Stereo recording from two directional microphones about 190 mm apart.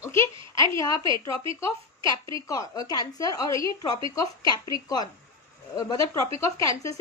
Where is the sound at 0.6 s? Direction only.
15° left (ahead or behind).